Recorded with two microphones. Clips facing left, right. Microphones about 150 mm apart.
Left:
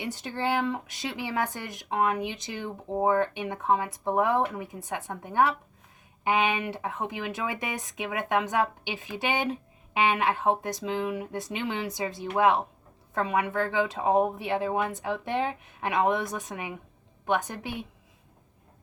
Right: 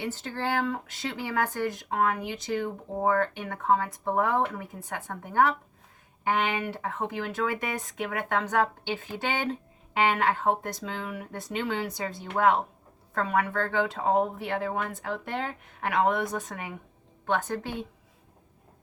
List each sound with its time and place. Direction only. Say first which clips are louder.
0.0 s speech: left 1 dB; 15° left (ahead or behind)